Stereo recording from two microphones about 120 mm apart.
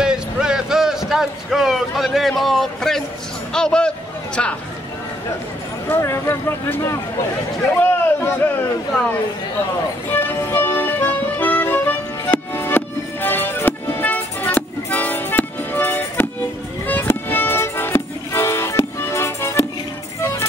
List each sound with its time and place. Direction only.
0.0 s speech: 5° right (ahead or behind)
5.9 s speech: 20° left (ahead or behind)
10.1 s music: 20° left (ahead or behind)